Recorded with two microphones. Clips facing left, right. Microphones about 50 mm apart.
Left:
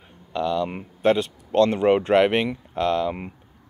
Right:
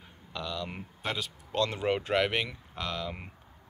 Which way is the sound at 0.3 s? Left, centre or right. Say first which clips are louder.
Left 12 dB; centre.